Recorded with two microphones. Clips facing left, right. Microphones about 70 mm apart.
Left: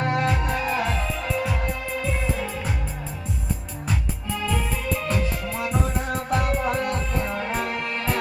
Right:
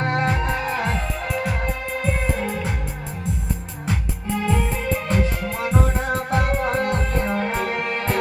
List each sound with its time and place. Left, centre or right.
0.0 s music: right
4.4 s music: right
5.1 s music: right